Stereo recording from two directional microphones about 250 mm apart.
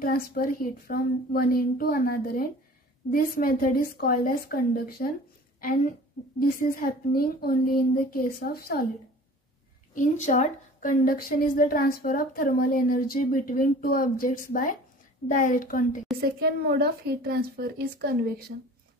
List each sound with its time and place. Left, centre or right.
0.0 s a woman's voice: left
6.2 s a woman's voice: left
9.9 s a woman's voice: left
16.2 s speech: right